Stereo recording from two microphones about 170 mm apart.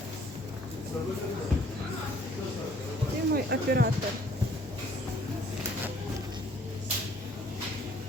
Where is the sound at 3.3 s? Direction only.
65° right (ahead or behind).